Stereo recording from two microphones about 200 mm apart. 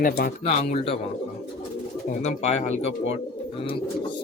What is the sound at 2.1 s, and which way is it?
Speech, 35° left (ahead or behind).